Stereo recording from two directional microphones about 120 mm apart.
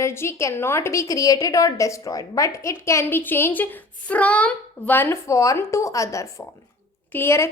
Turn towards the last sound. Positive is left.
turn(degrees=20)  # may be behind; listen again after turning